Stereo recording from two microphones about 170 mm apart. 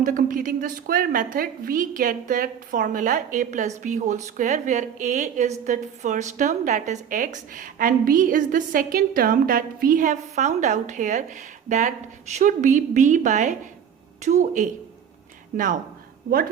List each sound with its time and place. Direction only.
0.0 s a woman's voice: 50° right (ahead or behind)